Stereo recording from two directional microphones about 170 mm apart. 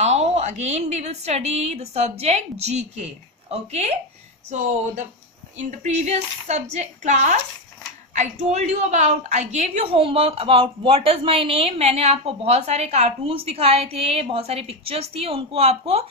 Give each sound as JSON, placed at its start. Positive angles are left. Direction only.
{"t": 0.0, "sound": "a woman's voice", "side_deg": -40}